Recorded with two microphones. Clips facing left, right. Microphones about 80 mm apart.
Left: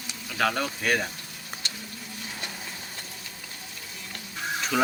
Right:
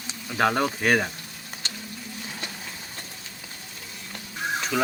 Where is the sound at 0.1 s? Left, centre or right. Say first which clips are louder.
Right 3 dB; right.